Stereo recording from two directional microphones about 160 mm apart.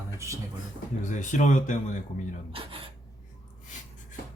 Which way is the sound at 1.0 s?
50° left (ahead or behind).